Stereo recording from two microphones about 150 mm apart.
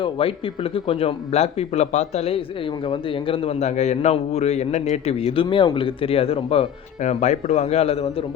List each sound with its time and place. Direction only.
0.0 s speech: 35° left (ahead or behind)